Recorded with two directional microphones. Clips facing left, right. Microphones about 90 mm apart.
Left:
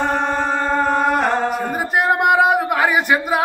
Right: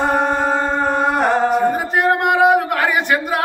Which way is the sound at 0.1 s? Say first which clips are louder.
Right 3 dB; 10° right (ahead or behind).